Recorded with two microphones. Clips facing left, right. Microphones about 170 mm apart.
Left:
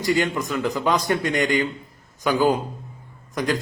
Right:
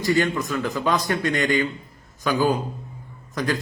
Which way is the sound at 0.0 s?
15° left (ahead or behind).